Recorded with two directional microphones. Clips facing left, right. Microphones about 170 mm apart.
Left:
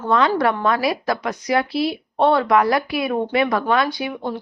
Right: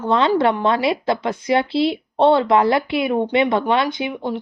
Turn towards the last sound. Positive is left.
turn(degrees=-20)  # may be behind; listen again after turning